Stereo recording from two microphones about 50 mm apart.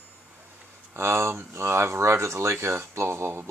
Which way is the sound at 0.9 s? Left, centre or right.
Right.